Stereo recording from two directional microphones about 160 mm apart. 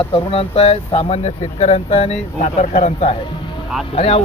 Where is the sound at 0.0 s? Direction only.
35° left (ahead or behind).